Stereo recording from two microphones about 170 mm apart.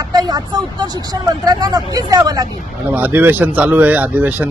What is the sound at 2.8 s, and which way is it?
Speech, 10° right (ahead or behind).